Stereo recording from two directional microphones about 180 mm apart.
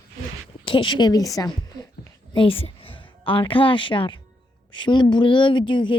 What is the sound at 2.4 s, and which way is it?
A woman's voice, 30° left (ahead or behind).